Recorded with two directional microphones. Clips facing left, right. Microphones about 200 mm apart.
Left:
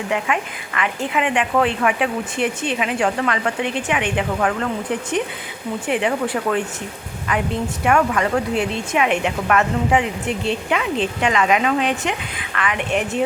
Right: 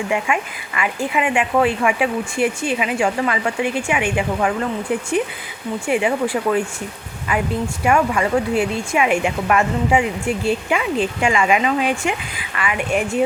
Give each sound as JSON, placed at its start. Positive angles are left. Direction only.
{"t": 0.1, "sound": "speech", "side_deg": -10}
{"t": 7.9, "sound": "a woman's voice", "side_deg": -5}